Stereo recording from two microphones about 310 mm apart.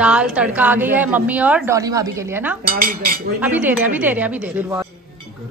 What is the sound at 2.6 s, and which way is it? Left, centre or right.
Cutlery, right.